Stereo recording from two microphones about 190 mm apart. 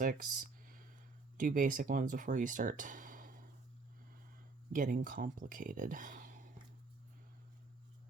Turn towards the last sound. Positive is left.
turn(degrees=-45)  # may be behind; listen again after turning